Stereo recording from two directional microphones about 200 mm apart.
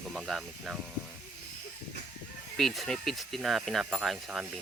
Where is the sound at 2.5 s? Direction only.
Centre (ahead or behind).